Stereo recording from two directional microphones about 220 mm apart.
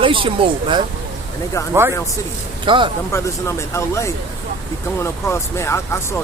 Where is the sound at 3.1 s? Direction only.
10° left (ahead or behind).